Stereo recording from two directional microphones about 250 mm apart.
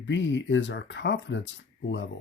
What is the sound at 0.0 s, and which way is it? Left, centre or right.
Speech, left.